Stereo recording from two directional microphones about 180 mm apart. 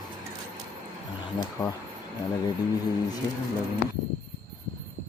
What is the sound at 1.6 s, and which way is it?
Speech, 20° left (ahead or behind).